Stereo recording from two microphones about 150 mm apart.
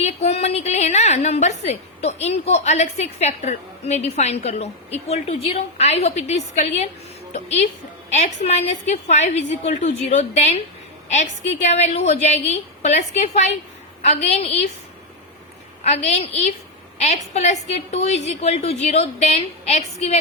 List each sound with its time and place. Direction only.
0.0 s a woman's voice: 45° left (ahead or behind)
15.8 s a woman's voice: 45° left (ahead or behind)